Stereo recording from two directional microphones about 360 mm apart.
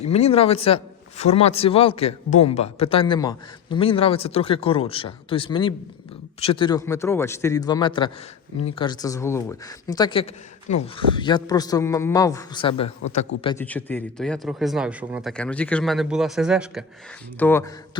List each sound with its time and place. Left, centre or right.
0.0 s a man's voice: centre